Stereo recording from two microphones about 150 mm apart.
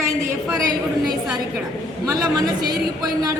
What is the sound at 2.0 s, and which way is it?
Speech, 25° right (ahead or behind).